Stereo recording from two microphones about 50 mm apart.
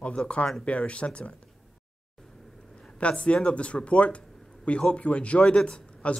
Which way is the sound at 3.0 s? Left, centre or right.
Left.